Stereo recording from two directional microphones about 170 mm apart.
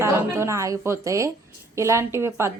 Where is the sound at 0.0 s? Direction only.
15° right (ahead or behind).